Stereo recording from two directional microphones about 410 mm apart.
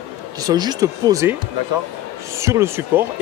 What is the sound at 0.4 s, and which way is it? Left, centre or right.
Speech, centre.